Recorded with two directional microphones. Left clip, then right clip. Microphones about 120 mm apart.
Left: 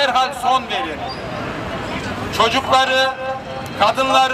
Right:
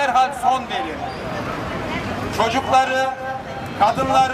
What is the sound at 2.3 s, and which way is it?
A man's voice, 30° left (ahead or behind).